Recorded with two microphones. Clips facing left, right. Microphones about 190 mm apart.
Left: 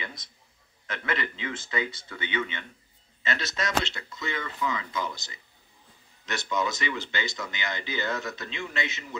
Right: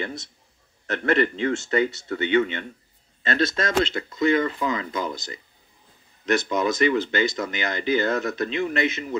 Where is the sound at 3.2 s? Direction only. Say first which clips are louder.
Right 8 dB; 55° right (ahead or behind).